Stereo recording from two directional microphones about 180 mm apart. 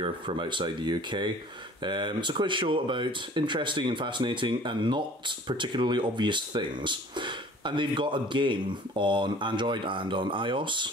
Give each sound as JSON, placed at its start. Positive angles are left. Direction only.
{"t": 0.0, "sound": "speech", "side_deg": -25}